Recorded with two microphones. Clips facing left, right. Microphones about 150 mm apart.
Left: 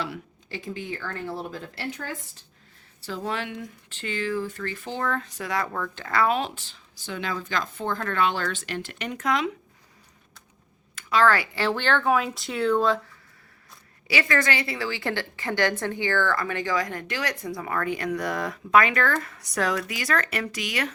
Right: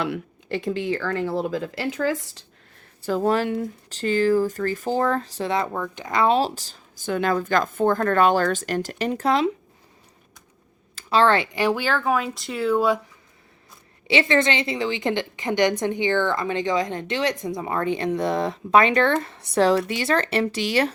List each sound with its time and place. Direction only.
0.0 s speech: 60° right (ahead or behind); by 2.4 s 90° right
3.0 s speech: 50° right (ahead or behind); by 9.5 s 30° right (ahead or behind)
10.9 s speech: 30° right (ahead or behind); by 13.0 s 10° right (ahead or behind)
14.1 s a woman's voice: 25° right (ahead or behind)